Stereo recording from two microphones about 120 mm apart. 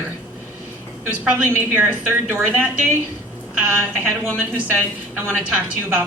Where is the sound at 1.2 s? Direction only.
15° right (ahead or behind).